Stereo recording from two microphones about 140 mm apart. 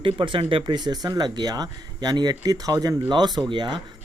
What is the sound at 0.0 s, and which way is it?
Speech, 40° right (ahead or behind).